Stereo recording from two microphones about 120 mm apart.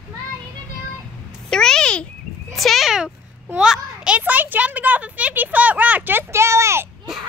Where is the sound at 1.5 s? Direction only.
5° left (ahead or behind).